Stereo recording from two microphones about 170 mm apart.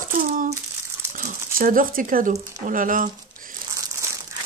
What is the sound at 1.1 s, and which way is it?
Speech, 50° right (ahead or behind).